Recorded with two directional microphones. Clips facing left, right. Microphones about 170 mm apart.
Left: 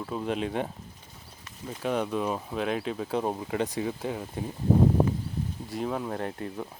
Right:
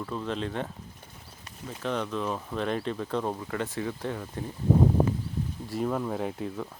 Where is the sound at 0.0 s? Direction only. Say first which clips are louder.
Left 2 dB; 10° left (ahead or behind).